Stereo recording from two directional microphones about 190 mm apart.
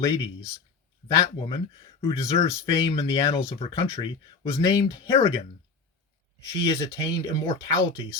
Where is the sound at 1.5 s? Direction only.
20° left (ahead or behind).